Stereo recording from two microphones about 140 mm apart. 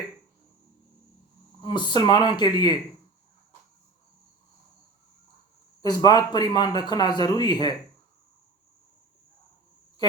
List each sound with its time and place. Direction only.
1.6 s speech: 35° left (ahead or behind)
5.8 s speech: 30° left (ahead or behind)